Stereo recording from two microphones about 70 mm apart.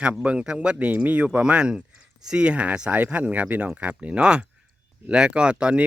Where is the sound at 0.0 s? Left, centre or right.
Centre.